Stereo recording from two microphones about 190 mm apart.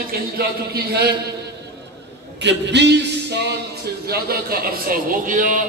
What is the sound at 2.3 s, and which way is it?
Speech, 65° right (ahead or behind).